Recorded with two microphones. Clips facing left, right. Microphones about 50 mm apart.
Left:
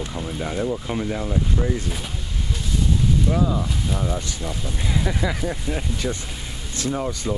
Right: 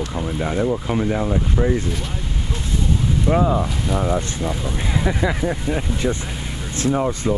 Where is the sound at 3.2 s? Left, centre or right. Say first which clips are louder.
Right 4 dB; right.